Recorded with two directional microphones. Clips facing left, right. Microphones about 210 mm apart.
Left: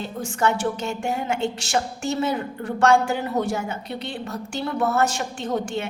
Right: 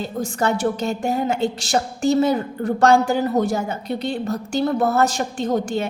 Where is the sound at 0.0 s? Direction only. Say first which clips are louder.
Right 2 dB; 40° right (ahead or behind).